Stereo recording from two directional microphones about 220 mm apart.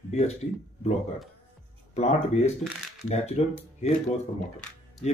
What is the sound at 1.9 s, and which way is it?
Speech, 30° left (ahead or behind).